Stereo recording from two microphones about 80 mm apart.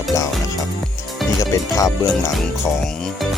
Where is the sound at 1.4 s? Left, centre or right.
Left.